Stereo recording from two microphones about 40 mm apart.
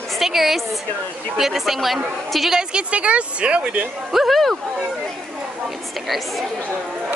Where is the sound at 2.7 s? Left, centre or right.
Right.